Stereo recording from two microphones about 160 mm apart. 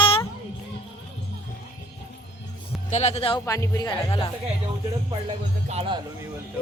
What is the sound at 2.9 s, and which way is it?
Speech, 45° left (ahead or behind).